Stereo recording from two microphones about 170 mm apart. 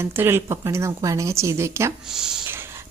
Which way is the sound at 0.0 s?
15° right (ahead or behind).